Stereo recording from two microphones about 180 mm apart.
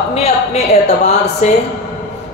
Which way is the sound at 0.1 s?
35° left (ahead or behind).